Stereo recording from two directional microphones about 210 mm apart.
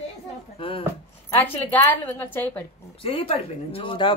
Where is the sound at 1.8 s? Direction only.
10° left (ahead or behind).